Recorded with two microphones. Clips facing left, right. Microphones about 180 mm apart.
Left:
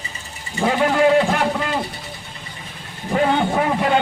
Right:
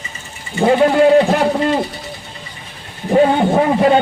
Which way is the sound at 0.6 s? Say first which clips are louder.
Right 6 dB; 30° right (ahead or behind).